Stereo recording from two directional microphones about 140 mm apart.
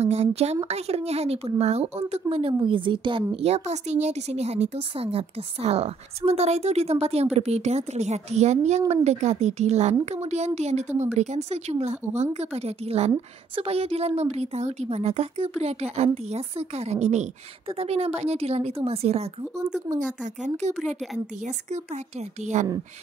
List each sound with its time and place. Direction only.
0.0 s speech: 50° right (ahead or behind)
20.0 s speech: 60° right (ahead or behind)
22.4 s speech: 55° right (ahead or behind)